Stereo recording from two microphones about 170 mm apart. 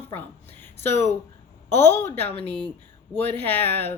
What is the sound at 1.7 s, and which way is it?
Speech, 15° left (ahead or behind).